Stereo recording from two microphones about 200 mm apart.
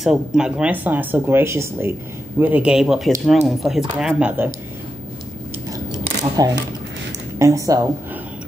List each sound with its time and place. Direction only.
0.0 s speech: 5° right (ahead or behind)
5.7 s a sound: 20° right (ahead or behind)
7.3 s speech: 15° right (ahead or behind)